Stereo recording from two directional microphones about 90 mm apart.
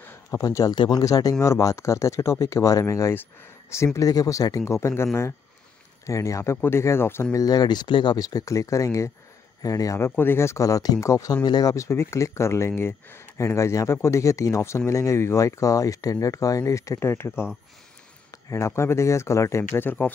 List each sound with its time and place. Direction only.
0.0 s a sound: 25° left (ahead or behind)
0.4 s speech: 40° left (ahead or behind)
0.7 s speech: 55° left (ahead or behind)
1.0 s speech: 40° left (ahead or behind)
7.3 s speech: 45° left (ahead or behind)
9.9 s speech: 25° left (ahead or behind)
11.4 s speech: 50° left (ahead or behind); by 17.5 s 25° left (ahead or behind)
18.5 s speech: 30° left (ahead or behind)